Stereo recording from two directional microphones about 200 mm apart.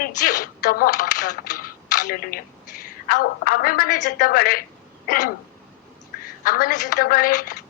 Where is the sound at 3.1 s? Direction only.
50° left (ahead or behind).